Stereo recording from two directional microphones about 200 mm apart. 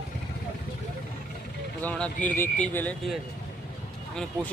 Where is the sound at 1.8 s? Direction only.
10° left (ahead or behind).